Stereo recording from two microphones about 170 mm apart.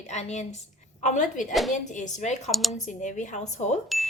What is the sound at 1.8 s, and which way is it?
A woman's voice, 45° left (ahead or behind).